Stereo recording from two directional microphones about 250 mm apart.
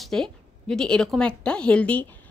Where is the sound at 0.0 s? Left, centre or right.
Centre.